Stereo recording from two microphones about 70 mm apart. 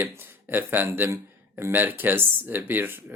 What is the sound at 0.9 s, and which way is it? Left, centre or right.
Speech, right.